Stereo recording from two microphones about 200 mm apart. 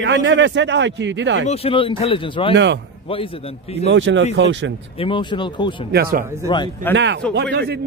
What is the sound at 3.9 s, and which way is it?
Speech, 65° right (ahead or behind).